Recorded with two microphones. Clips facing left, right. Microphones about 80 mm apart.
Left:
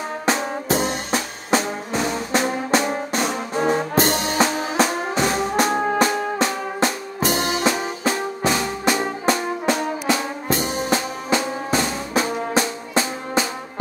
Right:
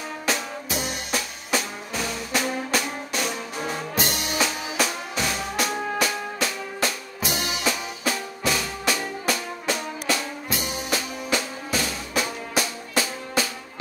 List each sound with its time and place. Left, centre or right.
0.2 s music: left
10.5 s drum: left
12.5 s music: left